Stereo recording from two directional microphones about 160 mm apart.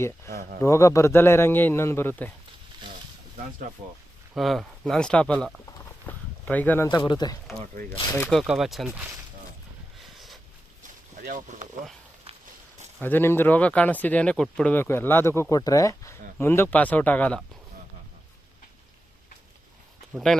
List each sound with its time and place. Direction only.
0.3 s speech: 70° right (ahead or behind)
0.6 s speech: 20° left (ahead or behind)
4.4 s speech: centre (ahead or behind)
6.1 s a sound: 10° left (ahead or behind)
6.8 s speech: 30° left (ahead or behind)
8.3 s speech: centre (ahead or behind)
10.2 s a sound: centre (ahead or behind)
11.2 s speech: 55° right (ahead or behind)
13.0 s speech: 10° left (ahead or behind)